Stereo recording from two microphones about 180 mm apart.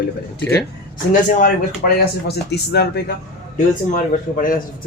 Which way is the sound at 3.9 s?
50° left (ahead or behind).